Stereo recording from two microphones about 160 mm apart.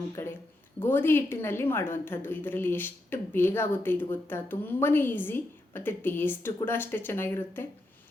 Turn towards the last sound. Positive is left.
turn(degrees=15)  # may be behind; listen again after turning